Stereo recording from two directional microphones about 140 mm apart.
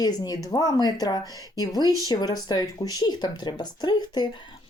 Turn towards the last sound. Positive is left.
turn(degrees=30)  # may be behind; listen again after turning